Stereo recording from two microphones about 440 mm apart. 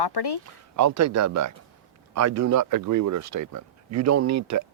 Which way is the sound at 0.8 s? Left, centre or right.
Right.